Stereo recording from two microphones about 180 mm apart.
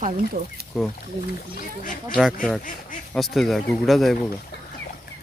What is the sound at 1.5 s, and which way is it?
Speech, 45° left (ahead or behind).